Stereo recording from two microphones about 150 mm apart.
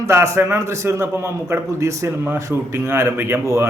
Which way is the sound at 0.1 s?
15° right (ahead or behind).